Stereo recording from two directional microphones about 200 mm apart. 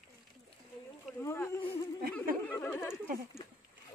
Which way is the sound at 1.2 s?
15° left (ahead or behind).